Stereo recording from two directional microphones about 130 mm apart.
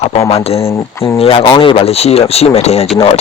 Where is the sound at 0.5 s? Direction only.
20° left (ahead or behind).